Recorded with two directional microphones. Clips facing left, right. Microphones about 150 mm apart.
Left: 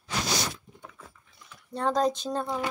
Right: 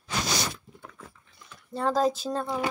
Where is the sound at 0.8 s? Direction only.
5° left (ahead or behind).